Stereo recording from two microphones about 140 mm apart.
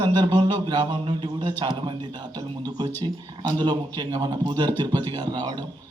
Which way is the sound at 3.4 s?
30° right (ahead or behind).